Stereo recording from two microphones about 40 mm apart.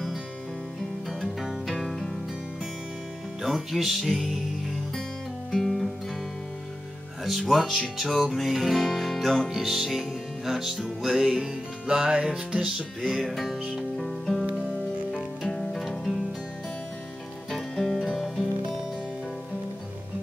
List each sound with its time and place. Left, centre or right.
1.7 s music: centre
3.4 s music: centre
5.5 s guitar: centre
7.2 s speech: centre
7.7 s music: centre
8.4 s music: centre
13.0 s music: centre
15.4 s music: centre
17.5 s music: centre